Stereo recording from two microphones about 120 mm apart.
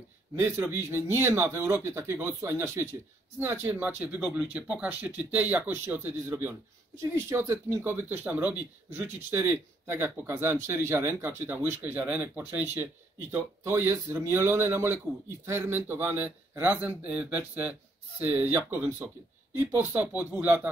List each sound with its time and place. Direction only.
0.4 s a man's voice: 20° right (ahead or behind)